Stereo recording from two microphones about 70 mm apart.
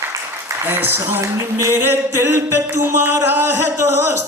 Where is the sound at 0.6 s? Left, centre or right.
Right.